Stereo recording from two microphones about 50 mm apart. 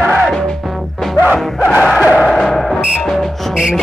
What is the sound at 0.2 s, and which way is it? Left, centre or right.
Music, centre.